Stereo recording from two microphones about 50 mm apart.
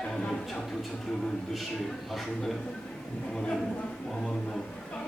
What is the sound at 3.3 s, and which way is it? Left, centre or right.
A capella, centre.